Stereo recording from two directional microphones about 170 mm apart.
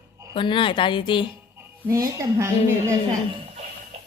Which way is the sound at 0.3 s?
30° left (ahead or behind).